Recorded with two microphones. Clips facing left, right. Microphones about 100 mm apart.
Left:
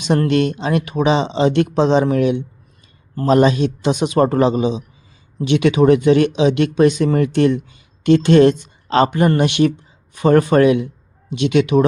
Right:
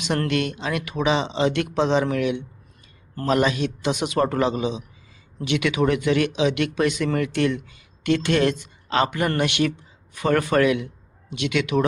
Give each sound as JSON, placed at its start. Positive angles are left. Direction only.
{"t": 0.0, "sound": "speech", "side_deg": 25}